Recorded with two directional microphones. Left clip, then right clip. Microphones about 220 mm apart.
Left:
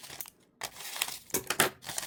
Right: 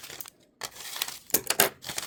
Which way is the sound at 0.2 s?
5° right (ahead or behind).